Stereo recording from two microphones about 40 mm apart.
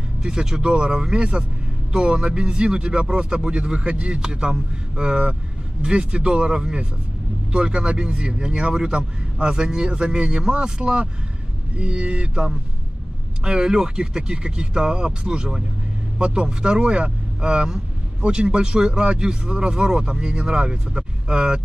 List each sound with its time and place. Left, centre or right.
0.2 s a man's voice: centre
13.4 s a man's voice: centre